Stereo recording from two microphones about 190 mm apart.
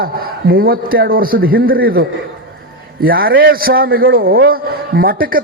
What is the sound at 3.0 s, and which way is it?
A man's voice, 50° right (ahead or behind).